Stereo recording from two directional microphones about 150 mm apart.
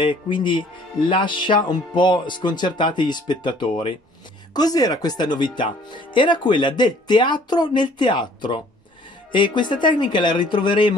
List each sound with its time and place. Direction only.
0.0 s speech: 35° left (ahead or behind)